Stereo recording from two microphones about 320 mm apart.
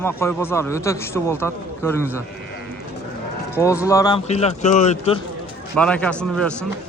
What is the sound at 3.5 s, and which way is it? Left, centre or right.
Speech, centre.